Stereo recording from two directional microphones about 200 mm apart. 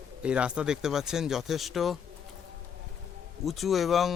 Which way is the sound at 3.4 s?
Centre (ahead or behind).